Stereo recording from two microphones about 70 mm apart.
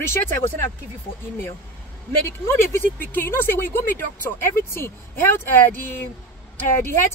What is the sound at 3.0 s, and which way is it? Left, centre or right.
Speech, left.